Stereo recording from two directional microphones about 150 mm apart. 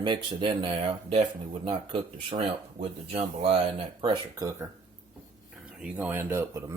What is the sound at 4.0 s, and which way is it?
Speech, 30° right (ahead or behind).